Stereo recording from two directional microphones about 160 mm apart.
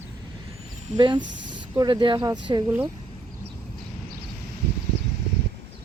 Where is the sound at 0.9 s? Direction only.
30° right (ahead or behind).